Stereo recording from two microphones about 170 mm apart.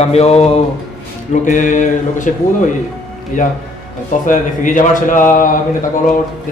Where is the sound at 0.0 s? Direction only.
40° left (ahead or behind).